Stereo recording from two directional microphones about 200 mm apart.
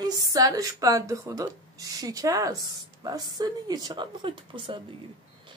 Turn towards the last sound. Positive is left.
turn(degrees=-25)  # may be behind; listen again after turning